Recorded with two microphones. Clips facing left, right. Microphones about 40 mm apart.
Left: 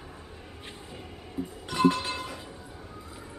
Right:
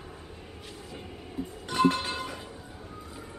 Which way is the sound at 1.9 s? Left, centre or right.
Centre.